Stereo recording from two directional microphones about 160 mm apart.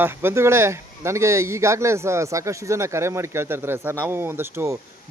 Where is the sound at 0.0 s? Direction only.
15° right (ahead or behind).